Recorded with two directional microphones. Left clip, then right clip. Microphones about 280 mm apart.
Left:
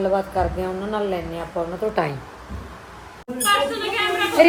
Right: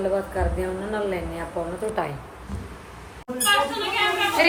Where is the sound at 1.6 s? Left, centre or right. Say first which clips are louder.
Left 4 dB; centre.